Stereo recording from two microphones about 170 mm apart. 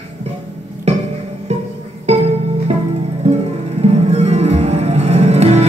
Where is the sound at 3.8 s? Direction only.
40° right (ahead or behind).